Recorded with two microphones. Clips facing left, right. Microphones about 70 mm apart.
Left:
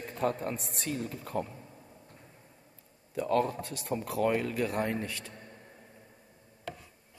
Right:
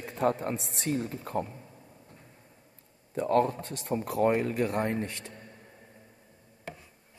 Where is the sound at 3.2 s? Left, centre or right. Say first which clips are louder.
Right 3 dB; right.